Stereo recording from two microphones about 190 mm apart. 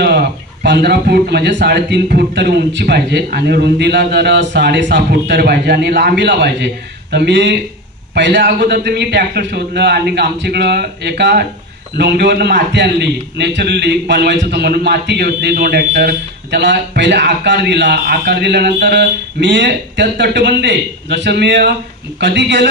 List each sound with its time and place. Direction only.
0.0 s a man's voice: 55° right (ahead or behind)